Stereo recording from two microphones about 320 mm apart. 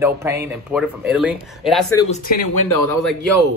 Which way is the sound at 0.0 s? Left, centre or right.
Centre.